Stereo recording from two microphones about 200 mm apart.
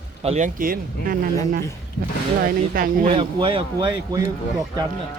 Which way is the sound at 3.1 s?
25° right (ahead or behind).